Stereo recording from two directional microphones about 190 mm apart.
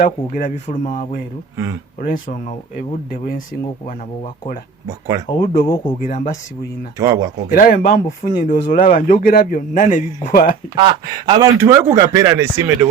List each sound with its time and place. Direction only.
0.0 s speech: 45° left (ahead or behind)
4.9 s speech: 20° right (ahead or behind)
5.4 s speech: 50° left (ahead or behind)
7.0 s speech: 20° right (ahead or behind)
7.5 s speech: 50° left (ahead or behind)
10.8 s speech: 25° right (ahead or behind)